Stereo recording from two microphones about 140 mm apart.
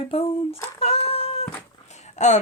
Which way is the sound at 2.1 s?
55° left (ahead or behind).